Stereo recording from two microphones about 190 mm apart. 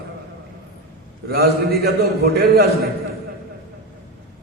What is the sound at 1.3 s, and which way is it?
A man's voice, 55° right (ahead or behind).